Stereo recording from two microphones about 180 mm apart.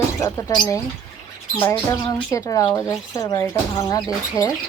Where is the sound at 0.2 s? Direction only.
20° left (ahead or behind).